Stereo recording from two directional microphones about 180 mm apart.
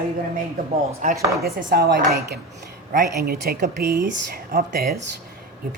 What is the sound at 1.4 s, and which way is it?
Speech, 60° right (ahead or behind).